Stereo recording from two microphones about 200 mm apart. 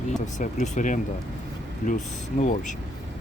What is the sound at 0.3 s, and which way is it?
Speech, 35° left (ahead or behind).